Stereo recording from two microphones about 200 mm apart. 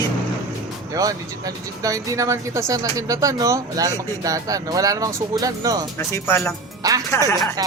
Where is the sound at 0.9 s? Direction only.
15° right (ahead or behind).